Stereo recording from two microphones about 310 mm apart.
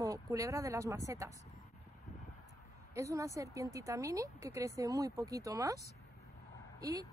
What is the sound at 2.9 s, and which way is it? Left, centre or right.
Speech, centre.